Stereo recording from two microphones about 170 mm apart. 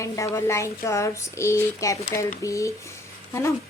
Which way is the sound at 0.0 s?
15° left (ahead or behind).